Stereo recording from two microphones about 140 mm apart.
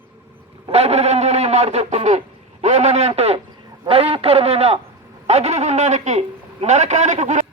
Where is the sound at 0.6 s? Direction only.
50° right (ahead or behind).